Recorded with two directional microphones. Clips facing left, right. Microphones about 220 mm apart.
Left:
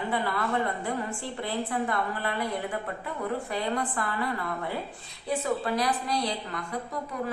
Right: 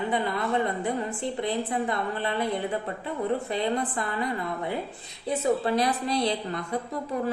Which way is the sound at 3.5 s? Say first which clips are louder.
Right 3 dB; 20° right (ahead or behind).